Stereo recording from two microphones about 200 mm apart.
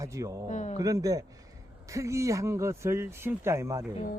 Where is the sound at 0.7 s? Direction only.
20° right (ahead or behind).